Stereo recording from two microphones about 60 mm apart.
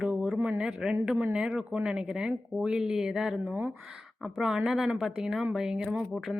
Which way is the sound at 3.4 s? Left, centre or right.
Right.